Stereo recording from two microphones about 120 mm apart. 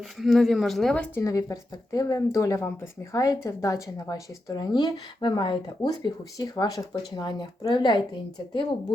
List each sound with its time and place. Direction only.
0.0 s speech: centre (ahead or behind)
1.2 s a woman's voice: 30° left (ahead or behind)